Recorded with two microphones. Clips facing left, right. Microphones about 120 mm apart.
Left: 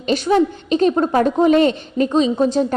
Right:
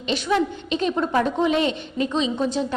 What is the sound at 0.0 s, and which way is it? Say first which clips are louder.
A woman's voice: left 6 dB; 45° left (ahead or behind).